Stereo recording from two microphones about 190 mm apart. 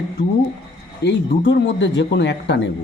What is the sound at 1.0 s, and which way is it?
A man's voice, 65° left (ahead or behind).